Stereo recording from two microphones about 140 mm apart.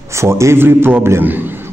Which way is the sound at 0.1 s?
20° right (ahead or behind).